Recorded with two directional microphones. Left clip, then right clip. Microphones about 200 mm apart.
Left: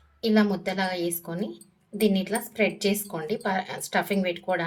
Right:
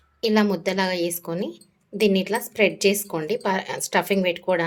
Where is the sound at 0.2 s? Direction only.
45° right (ahead or behind).